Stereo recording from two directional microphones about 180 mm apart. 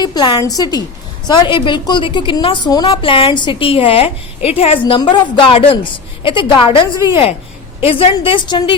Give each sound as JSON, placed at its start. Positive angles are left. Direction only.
{"t": 0.0, "sound": "a woman's voice", "side_deg": 25}